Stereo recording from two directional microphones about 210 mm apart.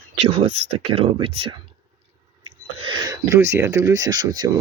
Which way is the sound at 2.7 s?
25° right (ahead or behind).